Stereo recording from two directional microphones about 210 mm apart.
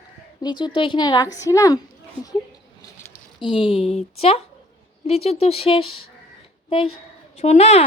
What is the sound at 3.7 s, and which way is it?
A woman's voice, 25° left (ahead or behind).